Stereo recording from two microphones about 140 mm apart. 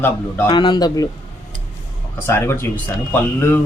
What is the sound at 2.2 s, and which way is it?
Speech, 15° left (ahead or behind).